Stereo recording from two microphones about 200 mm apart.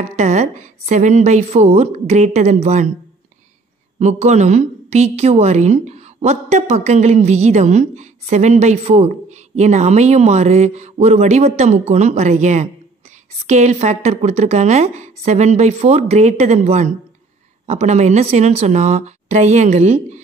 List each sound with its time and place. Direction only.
0.1 s a woman's voice: 35° right (ahead or behind)
4.0 s a woman's voice: 35° right (ahead or behind)